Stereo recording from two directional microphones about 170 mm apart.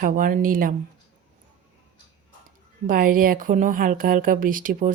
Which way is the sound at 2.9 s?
55° right (ahead or behind).